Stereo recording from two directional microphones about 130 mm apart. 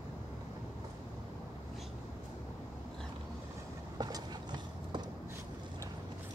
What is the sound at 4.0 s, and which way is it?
Train, 30° right (ahead or behind).